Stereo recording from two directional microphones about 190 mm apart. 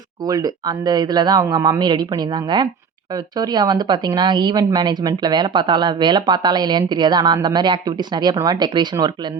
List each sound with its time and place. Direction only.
0.3 s a woman's voice: 20° right (ahead or behind)